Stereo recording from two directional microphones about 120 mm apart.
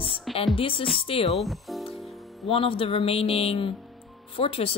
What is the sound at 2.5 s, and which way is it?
Speech, 50° left (ahead or behind).